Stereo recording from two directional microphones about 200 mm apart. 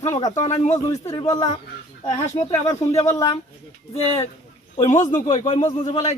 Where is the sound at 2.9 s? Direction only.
15° left (ahead or behind).